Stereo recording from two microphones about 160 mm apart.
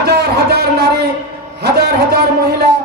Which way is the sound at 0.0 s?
90° right.